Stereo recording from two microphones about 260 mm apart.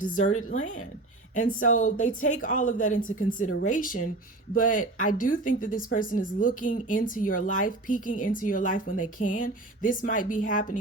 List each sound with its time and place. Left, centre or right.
0.0 s speech: left